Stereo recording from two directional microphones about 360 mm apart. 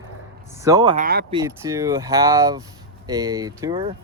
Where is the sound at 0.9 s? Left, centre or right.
Right.